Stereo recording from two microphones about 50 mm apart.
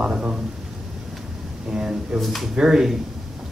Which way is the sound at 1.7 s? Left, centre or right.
Centre.